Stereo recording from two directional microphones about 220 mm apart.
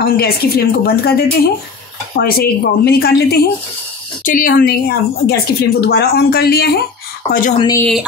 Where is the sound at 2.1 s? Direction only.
45° left (ahead or behind).